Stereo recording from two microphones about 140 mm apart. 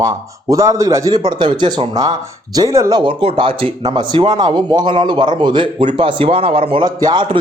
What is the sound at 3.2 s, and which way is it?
Speech, 40° right (ahead or behind).